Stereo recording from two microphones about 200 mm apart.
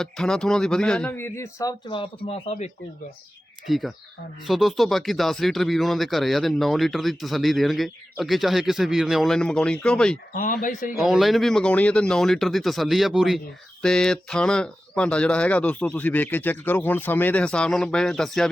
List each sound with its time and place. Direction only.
0.0 s speech: 5° left (ahead or behind); by 2.6 s 30° left (ahead or behind)
3.7 s speech: centre (ahead or behind)
10.3 s speech: 45° left (ahead or behind)
10.9 s speech: centre (ahead or behind)